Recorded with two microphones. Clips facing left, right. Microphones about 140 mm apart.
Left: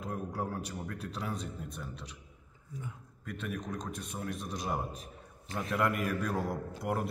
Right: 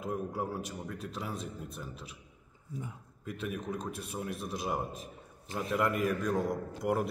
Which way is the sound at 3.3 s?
5° right (ahead or behind).